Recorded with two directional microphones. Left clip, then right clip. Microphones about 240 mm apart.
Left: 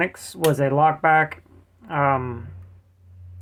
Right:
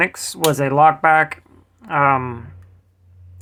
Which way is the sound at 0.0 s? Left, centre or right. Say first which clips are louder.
Right 4 dB; right.